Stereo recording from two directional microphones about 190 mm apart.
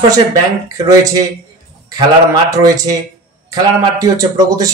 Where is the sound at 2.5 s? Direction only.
20° right (ahead or behind).